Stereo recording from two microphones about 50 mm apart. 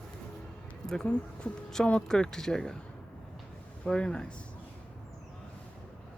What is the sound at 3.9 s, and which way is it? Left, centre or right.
Speech, centre.